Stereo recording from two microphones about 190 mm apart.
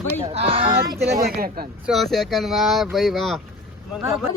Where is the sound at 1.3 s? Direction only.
50° right (ahead or behind).